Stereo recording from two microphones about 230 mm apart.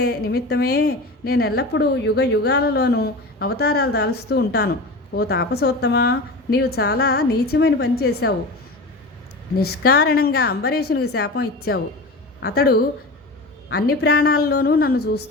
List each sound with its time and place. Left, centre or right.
0.0 s a woman's voice: left
9.6 s a woman's voice: left